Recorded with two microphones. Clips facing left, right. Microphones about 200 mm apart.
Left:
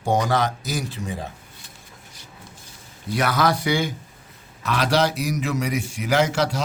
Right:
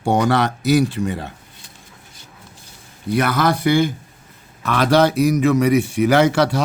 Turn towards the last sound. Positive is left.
turn(degrees=-60)  # may be behind; listen again after turning